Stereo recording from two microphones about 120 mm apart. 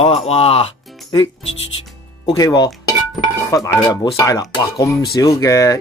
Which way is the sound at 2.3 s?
30° left (ahead or behind).